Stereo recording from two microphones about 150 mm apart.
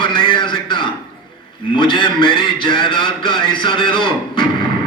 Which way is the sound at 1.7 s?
35° left (ahead or behind).